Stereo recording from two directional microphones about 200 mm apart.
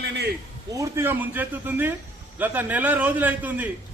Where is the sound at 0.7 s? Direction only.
15° right (ahead or behind).